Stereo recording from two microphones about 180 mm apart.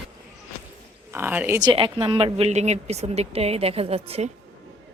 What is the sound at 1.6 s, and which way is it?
Speech, 25° right (ahead or behind).